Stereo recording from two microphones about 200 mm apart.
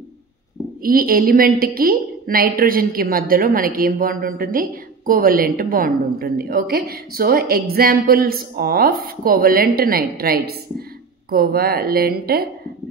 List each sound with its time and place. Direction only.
0.8 s a woman's voice: 45° right (ahead or behind)